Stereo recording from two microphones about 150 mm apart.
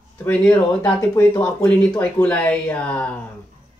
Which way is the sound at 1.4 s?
10° left (ahead or behind).